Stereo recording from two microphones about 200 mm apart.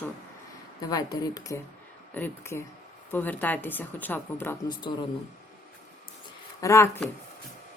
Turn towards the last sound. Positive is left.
turn(degrees=15)  # may be behind; listen again after turning